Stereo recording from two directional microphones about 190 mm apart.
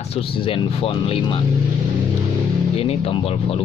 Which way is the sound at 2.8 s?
30° left (ahead or behind).